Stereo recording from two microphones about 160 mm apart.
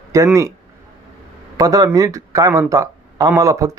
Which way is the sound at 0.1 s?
20° right (ahead or behind).